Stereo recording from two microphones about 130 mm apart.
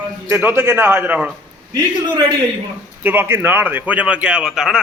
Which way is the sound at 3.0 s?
15° right (ahead or behind).